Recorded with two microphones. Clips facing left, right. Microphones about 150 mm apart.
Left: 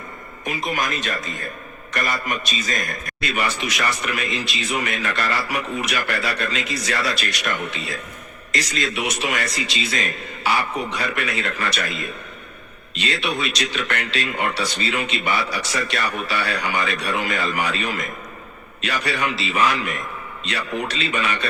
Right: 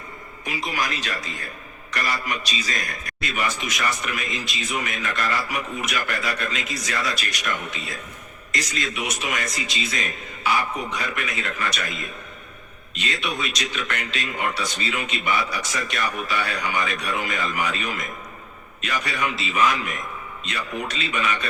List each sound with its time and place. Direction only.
0.4 s a man's voice: 50° left (ahead or behind)
3.2 s speech: 70° left (ahead or behind)